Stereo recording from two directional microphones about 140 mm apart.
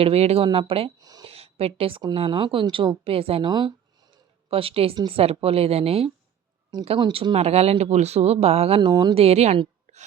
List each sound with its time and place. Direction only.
0.0 s speech: 50° right (ahead or behind)
1.0 s speech: 25° right (ahead or behind)
1.3 s a sound: 45° right (ahead or behind)
2.1 s speech: 40° right (ahead or behind)
8.8 s speech: 30° right (ahead or behind)
9.1 s speech: 45° right (ahead or behind)